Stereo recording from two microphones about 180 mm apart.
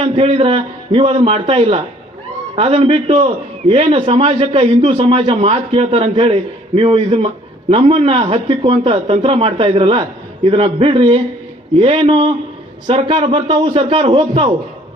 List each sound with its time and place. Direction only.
0.0 s a man's voice: 35° right (ahead or behind)